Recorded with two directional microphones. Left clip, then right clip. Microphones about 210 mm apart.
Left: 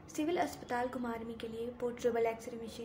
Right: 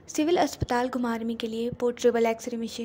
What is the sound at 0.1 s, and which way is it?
A woman's voice, 45° right (ahead or behind).